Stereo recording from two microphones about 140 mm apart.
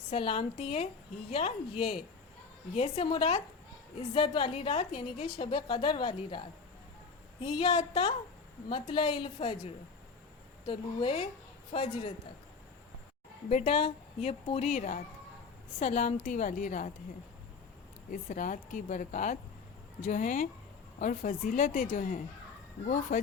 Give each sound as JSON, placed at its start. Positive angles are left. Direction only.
{"t": 0.1, "sound": "a woman's voice", "side_deg": 40}
{"t": 7.6, "sound": "a woman's voice", "side_deg": 45}
{"t": 13.5, "sound": "a woman's voice", "side_deg": 50}
{"t": 18.1, "sound": "speech", "side_deg": 70}